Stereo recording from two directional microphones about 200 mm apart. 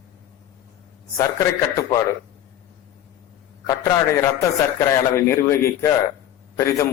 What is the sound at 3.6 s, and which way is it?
A man's voice, 15° left (ahead or behind).